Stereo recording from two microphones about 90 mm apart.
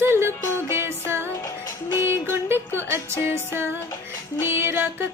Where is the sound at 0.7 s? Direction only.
25° right (ahead or behind).